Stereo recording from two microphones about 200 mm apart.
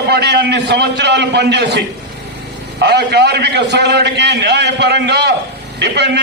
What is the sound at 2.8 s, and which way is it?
A man's voice, 55° right (ahead or behind).